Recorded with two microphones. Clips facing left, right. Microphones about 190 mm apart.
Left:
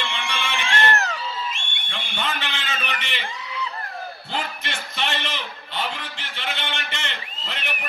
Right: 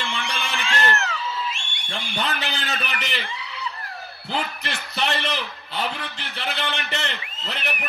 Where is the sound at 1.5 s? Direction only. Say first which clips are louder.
Even; 55° left (ahead or behind).